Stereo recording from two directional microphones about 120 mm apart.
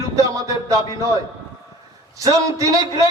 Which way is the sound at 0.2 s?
30° right (ahead or behind).